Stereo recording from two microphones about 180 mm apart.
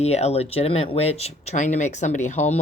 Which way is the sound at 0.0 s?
35° left (ahead or behind).